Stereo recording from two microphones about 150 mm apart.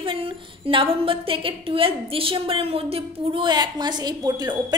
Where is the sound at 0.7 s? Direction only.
35° right (ahead or behind).